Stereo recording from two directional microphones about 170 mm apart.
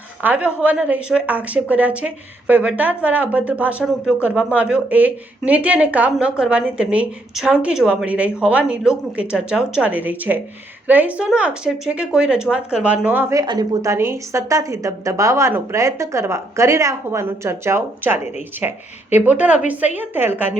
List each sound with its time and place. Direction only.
0.2 s a woman's voice: 10° right (ahead or behind)
13.4 s a woman's voice: 25° right (ahead or behind)